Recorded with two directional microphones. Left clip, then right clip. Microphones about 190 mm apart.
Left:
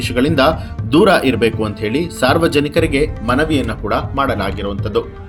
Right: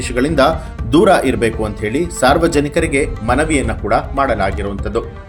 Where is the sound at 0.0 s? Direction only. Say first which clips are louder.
Even; 30° left (ahead or behind).